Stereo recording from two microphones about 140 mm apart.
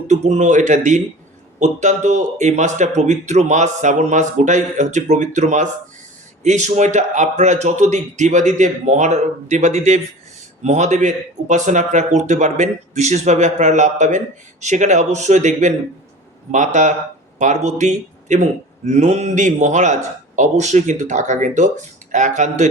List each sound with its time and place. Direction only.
0.1 s speech: 55° right (ahead or behind)